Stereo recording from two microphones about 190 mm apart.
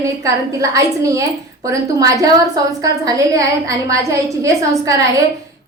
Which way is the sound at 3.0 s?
15° right (ahead or behind).